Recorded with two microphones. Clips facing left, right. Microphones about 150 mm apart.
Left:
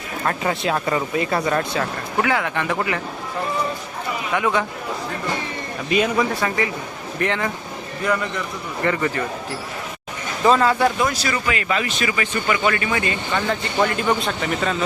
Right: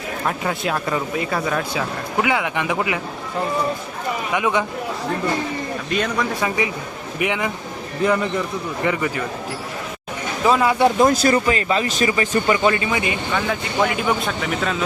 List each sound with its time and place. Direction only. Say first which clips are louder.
0.3 s speech: left 2 dB; centre (ahead or behind)
2.2 s speech: even; 15° right (ahead or behind)
4.4 s speech: even; 15° right (ahead or behind)
5.9 s speech: left 4 dB; 5° left (ahead or behind)
7.2 s speech: even; 10° right (ahead or behind)
8.8 s speech: left 1 dB; 10° right (ahead or behind)
10.4 s speech: even; 10° right (ahead or behind)
10.9 s speech: right 7 dB; 45° right (ahead or behind)
11.4 s speech: right 3 dB; 30° right (ahead or behind)
12.6 s speech: right 2 dB; 25° right (ahead or behind)
13.3 s speech: left 1 dB; centre (ahead or behind)